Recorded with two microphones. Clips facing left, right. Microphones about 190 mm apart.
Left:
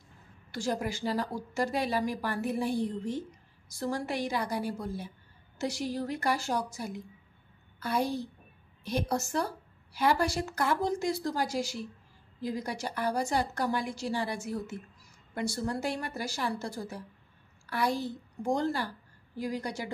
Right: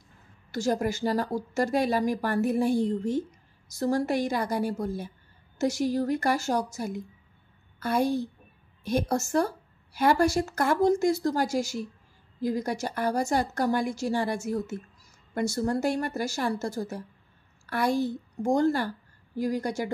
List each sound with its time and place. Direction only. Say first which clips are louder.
0.5 s a woman's voice: right 5 dB; 45° right (ahead or behind)